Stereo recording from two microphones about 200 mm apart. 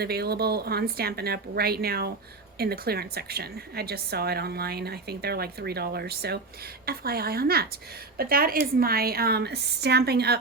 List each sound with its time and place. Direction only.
0.0 s a woman's voice: 50° right (ahead or behind)